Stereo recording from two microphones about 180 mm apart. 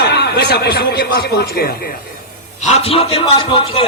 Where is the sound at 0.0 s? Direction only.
65° left (ahead or behind).